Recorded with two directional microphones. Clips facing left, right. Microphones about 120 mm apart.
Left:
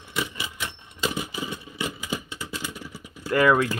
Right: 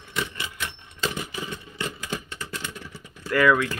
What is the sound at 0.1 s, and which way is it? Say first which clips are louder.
Typewriter: even; 10° left (ahead or behind).